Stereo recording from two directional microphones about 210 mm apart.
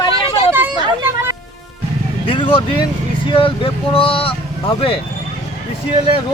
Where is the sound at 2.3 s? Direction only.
25° left (ahead or behind).